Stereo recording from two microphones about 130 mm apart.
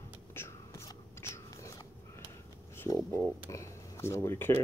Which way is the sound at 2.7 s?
20° left (ahead or behind).